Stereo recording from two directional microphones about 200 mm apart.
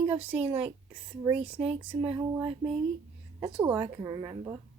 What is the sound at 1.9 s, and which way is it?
Speech, 20° right (ahead or behind).